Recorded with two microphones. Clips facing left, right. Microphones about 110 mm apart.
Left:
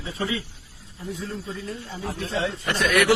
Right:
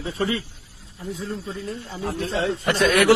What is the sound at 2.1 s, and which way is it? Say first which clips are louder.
Speech: right 3 dB; 55° right (ahead or behind).